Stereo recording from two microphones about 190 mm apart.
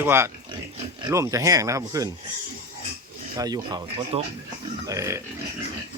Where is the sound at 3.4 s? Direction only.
20° right (ahead or behind).